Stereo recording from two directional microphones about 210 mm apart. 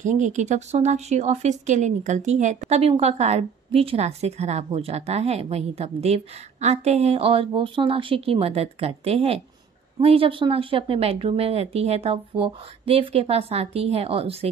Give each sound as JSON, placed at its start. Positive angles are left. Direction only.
{"t": 0.0, "sound": "a woman's voice", "side_deg": -35}